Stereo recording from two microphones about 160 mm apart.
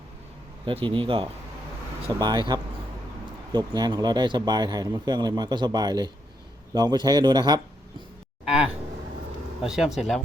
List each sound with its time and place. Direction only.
0.6 s speech: 35° right (ahead or behind)
9.6 s speech: 5° right (ahead or behind)